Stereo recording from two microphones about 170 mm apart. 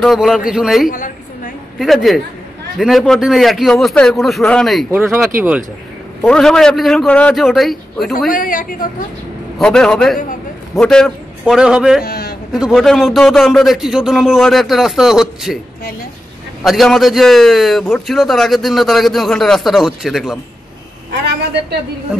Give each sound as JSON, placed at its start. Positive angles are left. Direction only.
{"t": 0.0, "sound": "a man's voice", "side_deg": 0}
{"t": 0.8, "sound": "a sound", "side_deg": 50}
{"t": 1.8, "sound": "a man's voice", "side_deg": 0}
{"t": 6.2, "sound": "a man's voice", "side_deg": 5}
{"t": 8.3, "sound": "a man's voice", "side_deg": 55}
{"t": 9.6, "sound": "a man's voice", "side_deg": 5}
{"t": 12.0, "sound": "a man's voice", "side_deg": 70}
{"t": 12.5, "sound": "a man's voice", "side_deg": 0}
{"t": 16.6, "sound": "a man's voice", "side_deg": 0}